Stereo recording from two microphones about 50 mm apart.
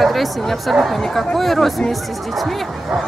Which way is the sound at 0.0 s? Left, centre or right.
Centre.